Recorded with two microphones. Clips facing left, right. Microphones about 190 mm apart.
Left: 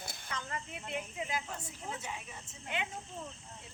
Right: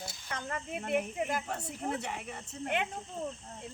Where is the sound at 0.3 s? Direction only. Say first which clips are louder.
Right 4 dB; 50° right (ahead or behind).